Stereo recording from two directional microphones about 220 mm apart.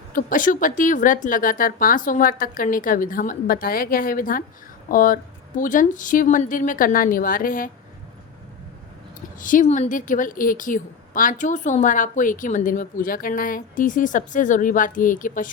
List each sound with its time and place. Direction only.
0.1 s a woman's voice: 40° left (ahead or behind)
9.4 s a woman's voice: 35° left (ahead or behind)